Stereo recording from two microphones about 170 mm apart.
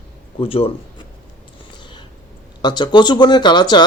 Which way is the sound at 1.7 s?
25° left (ahead or behind).